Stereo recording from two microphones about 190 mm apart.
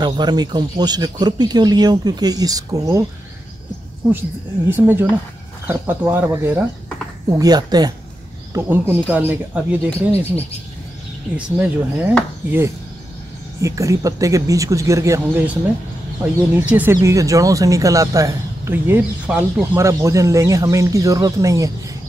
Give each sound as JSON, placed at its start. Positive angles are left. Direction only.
{"t": 0.0, "sound": "speech", "side_deg": -20}
{"t": 4.6, "sound": "speech", "side_deg": -10}
{"t": 16.5, "sound": "speech", "side_deg": -10}